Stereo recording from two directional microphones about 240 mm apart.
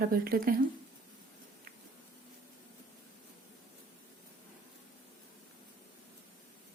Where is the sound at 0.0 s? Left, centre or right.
Right.